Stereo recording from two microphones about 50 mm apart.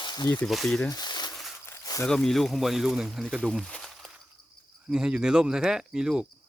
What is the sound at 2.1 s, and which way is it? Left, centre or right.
Speech, centre.